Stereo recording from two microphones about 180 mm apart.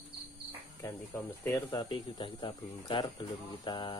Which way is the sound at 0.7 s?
10° left (ahead or behind).